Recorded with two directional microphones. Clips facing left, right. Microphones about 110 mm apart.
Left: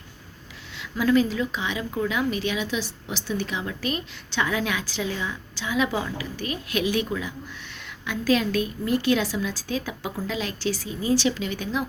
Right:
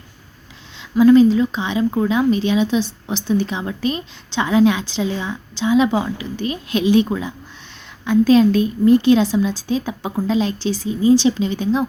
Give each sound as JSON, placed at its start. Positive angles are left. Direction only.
{"t": 0.8, "sound": "speech", "side_deg": -25}